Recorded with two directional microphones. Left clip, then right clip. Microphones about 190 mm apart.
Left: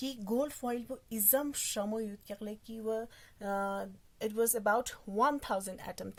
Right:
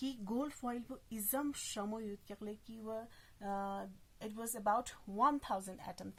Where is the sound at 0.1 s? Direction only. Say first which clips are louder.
Left 7 dB; 55° left (ahead or behind).